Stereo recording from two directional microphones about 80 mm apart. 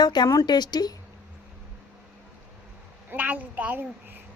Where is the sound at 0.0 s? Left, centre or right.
Left.